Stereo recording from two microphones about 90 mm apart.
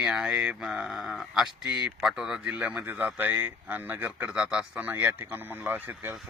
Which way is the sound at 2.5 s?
15° right (ahead or behind).